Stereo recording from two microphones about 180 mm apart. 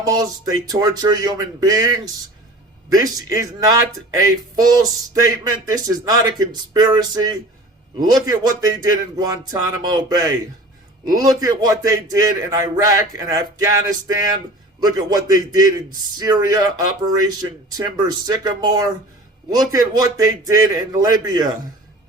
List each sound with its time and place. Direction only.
0.0 s speech: 20° right (ahead or behind)
14.8 s speech: 20° right (ahead or behind)